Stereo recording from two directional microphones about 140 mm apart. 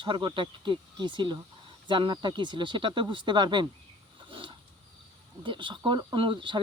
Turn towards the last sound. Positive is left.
turn(degrees=-35)  # may be behind; listen again after turning